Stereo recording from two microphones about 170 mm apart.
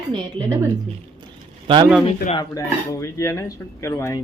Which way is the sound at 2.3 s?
20° left (ahead or behind).